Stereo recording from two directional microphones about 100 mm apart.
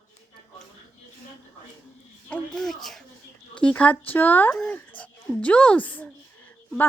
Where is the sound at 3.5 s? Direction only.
10° left (ahead or behind).